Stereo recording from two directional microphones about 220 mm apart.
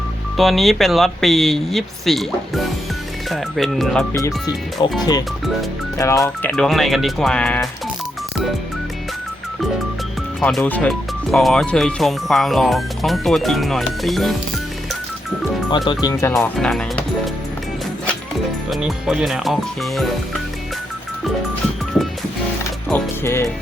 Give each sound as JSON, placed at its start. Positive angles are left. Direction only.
{"t": 0.3, "sound": "speech", "side_deg": 0}
{"t": 4.1, "sound": "speech", "side_deg": 15}
{"t": 6.0, "sound": "speech", "side_deg": 15}
{"t": 10.4, "sound": "speech", "side_deg": 5}
{"t": 15.9, "sound": "speech", "side_deg": 15}
{"t": 16.3, "sound": "speech", "side_deg": 0}
{"t": 18.7, "sound": "speech", "side_deg": 0}
{"t": 22.9, "sound": "speech", "side_deg": 10}